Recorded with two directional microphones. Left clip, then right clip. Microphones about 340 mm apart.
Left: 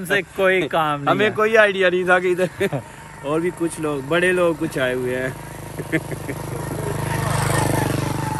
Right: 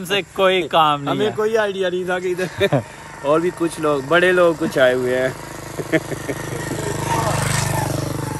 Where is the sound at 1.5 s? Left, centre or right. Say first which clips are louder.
Left 4 dB; centre.